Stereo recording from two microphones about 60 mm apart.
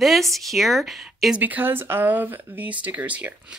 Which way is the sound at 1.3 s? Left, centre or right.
Right.